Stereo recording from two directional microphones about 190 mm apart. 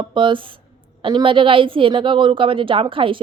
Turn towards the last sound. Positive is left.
turn(degrees=-25)  # may be behind; listen again after turning